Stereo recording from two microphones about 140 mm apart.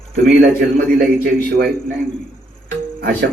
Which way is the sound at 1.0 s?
90° right.